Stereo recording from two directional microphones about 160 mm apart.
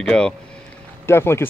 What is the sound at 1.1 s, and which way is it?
Speech, 15° left (ahead or behind).